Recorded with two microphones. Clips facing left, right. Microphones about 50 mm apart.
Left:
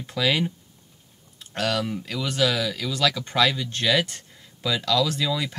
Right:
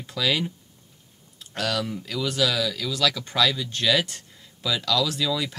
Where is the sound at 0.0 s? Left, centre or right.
Centre.